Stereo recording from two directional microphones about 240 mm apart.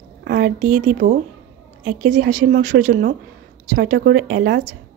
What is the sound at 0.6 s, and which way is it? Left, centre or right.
Speech, right.